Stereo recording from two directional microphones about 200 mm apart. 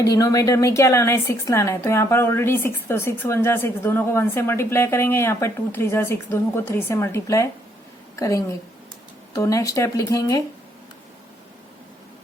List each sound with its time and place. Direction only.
0.0 s a woman's voice: 15° left (ahead or behind)